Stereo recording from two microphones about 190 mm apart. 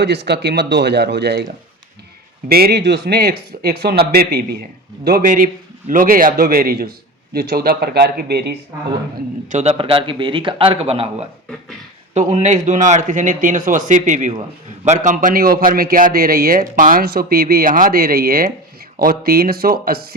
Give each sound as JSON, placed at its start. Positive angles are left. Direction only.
{"t": 0.0, "sound": "speech", "side_deg": -60}
{"t": 2.5, "sound": "a man's voice", "side_deg": -55}
{"t": 9.5, "sound": "a man's voice", "side_deg": -35}